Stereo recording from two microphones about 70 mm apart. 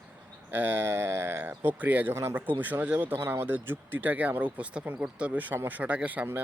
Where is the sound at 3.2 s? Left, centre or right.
Right.